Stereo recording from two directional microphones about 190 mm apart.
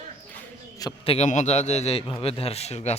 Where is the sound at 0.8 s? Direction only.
25° left (ahead or behind).